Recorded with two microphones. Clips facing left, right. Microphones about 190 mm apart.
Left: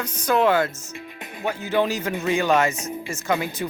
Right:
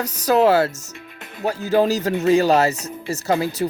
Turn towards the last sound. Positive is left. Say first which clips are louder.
# right 4 dB
turn(degrees=-35)  # may be behind; listen again after turning